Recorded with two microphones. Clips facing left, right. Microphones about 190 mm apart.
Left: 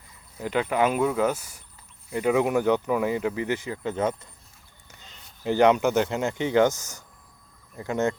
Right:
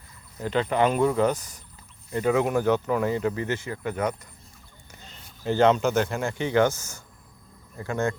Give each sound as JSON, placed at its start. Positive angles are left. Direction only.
{"t": 0.3, "sound": "speech", "side_deg": 10}
{"t": 5.4, "sound": "speech", "side_deg": 15}